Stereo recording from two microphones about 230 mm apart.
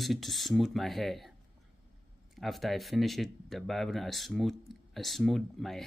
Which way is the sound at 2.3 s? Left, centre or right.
Centre.